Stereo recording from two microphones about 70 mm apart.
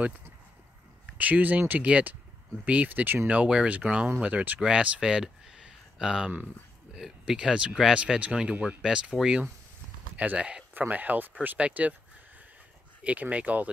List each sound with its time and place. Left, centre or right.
1.1 s speech: right
10.7 s speech: right
13.0 s speech: right